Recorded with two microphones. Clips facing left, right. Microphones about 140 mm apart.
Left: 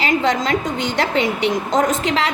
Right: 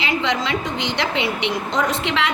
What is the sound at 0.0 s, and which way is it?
A woman's voice, 45° left (ahead or behind).